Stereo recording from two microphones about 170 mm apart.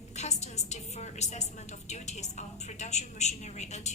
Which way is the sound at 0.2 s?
40° left (ahead or behind).